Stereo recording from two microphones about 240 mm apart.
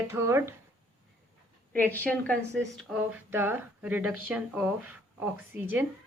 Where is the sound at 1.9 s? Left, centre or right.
Centre.